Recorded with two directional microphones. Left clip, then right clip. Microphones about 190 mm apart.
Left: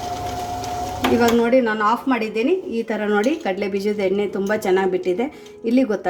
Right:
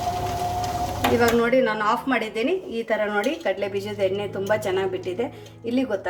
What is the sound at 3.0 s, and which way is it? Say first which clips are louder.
Speech: left 4 dB; 35° left (ahead or behind).